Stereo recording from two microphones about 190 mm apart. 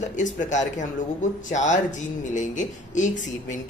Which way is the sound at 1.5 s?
40° left (ahead or behind).